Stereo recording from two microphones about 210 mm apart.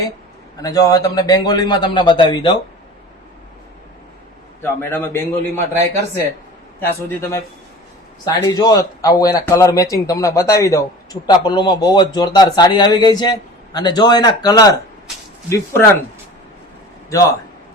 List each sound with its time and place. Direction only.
0.6 s a man's voice: 15° left (ahead or behind)
4.6 s speech: 10° left (ahead or behind)
5.5 s speech: 30° right (ahead or behind)
6.7 s speech: 15° left (ahead or behind)